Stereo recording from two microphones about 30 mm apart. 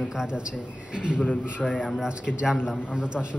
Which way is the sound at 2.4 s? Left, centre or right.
Centre.